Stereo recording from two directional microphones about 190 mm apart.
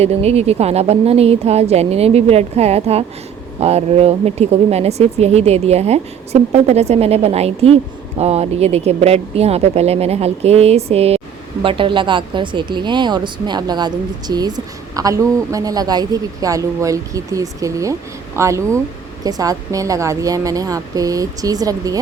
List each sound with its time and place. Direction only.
0.0 s speech: 35° right (ahead or behind)